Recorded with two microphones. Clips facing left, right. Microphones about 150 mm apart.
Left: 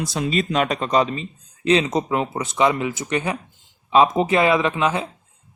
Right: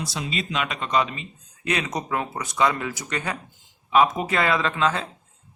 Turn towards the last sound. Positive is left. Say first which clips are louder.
# left 3 dB
turn(degrees=15)  # may be behind; listen again after turning